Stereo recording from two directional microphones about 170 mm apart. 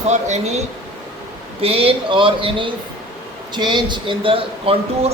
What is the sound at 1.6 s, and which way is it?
Speech, 35° right (ahead or behind).